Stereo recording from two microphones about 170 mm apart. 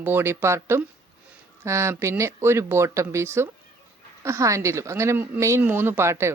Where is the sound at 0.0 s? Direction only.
15° right (ahead or behind).